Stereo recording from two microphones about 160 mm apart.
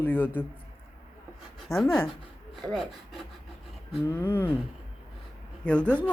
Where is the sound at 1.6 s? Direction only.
Centre (ahead or behind).